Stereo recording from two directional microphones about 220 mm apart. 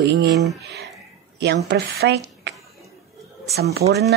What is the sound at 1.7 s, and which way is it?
Speech, 50° right (ahead or behind).